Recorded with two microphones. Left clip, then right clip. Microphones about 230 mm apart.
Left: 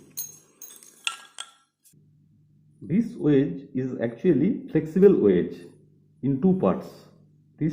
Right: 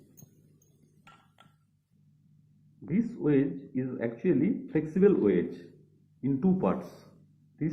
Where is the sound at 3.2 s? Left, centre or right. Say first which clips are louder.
Left 5 dB; left.